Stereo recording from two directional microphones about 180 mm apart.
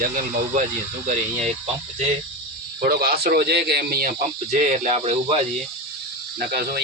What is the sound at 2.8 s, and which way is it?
Speech, 60° right (ahead or behind).